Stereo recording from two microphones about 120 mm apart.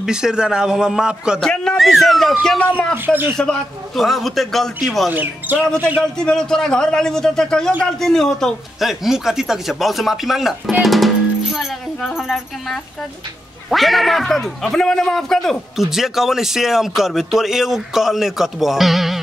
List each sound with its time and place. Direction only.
0.0 s speech: 5° right (ahead or behind)
1.4 s speech: 5° left (ahead or behind)
2.6 s a man's voice: 15° left (ahead or behind)
3.1 s speech: 15° right (ahead or behind)
3.3 s speech: 5° left (ahead or behind)
5.1 s speech: 15° right (ahead or behind)
6.1 s speech: 5° left (ahead or behind)